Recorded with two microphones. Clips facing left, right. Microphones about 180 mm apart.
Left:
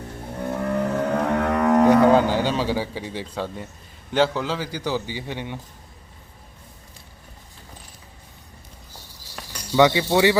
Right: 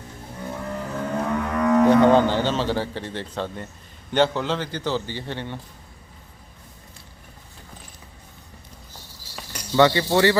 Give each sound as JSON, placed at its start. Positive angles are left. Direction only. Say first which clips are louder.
{"t": 0.3, "sound": "a sound", "louder": "left 7 dB", "side_deg": 60}
{"t": 1.9, "sound": "a man's voice", "louder": "right 1 dB", "side_deg": 5}
{"t": 9.7, "sound": "a man's voice", "louder": "even", "side_deg": 10}